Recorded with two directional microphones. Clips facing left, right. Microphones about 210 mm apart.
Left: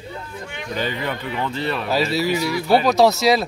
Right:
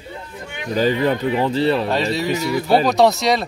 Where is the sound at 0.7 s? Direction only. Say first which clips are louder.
Right 8 dB; 40° right (ahead or behind).